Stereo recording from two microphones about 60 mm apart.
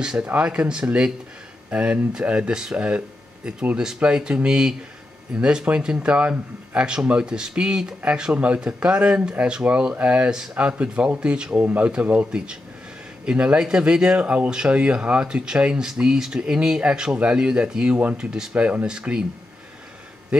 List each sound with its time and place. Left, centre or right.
0.2 s speech: centre
11.5 s speech: right; by 18.5 s centre
18.5 s speech: right
18.9 s speech: centre